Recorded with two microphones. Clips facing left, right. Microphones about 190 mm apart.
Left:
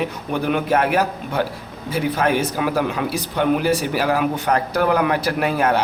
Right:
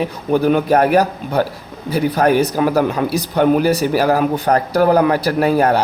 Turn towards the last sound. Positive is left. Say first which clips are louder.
# right 5 dB
turn(degrees=-40)  # may be behind; listen again after turning